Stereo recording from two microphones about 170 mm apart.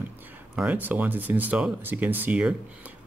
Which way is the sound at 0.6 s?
10° right (ahead or behind).